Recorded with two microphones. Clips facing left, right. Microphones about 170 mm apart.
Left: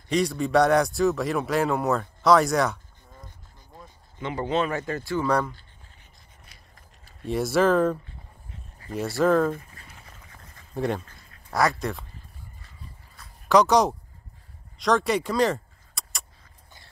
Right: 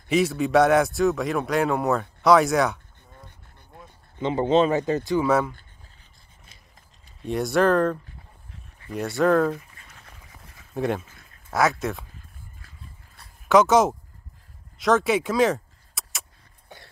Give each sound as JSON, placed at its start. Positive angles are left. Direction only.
{"t": 0.1, "sound": "a man's voice", "side_deg": -5}
{"t": 4.2, "sound": "speech", "side_deg": -25}
{"t": 5.2, "sound": "speech", "side_deg": -5}
{"t": 7.2, "sound": "a man's voice", "side_deg": 0}
{"t": 10.3, "sound": "a sound", "side_deg": 0}
{"t": 11.5, "sound": "a man's voice", "side_deg": 0}
{"t": 13.5, "sound": "a man's voice", "side_deg": 0}
{"t": 14.8, "sound": "a sound", "side_deg": 0}